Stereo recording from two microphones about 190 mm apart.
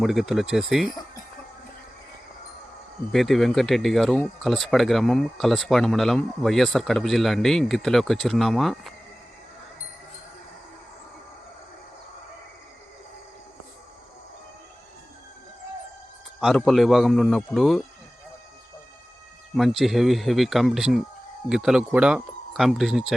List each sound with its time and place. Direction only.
0.0 s speech: centre (ahead or behind)
3.1 s speech: centre (ahead or behind)
16.4 s speech: centre (ahead or behind)
19.5 s speech: centre (ahead or behind)